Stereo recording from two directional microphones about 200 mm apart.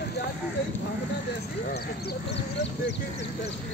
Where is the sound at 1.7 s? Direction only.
55° left (ahead or behind).